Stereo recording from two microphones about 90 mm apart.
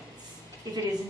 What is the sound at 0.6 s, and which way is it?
Speech, 50° right (ahead or behind).